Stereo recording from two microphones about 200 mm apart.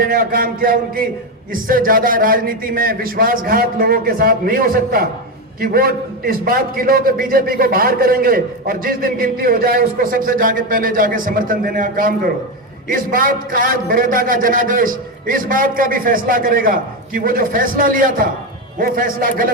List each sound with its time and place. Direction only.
0.0 s a man's voice: 45° right (ahead or behind)